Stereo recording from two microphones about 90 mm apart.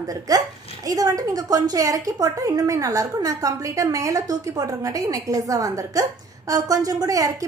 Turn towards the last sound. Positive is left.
turn(degrees=-40)  # may be behind; listen again after turning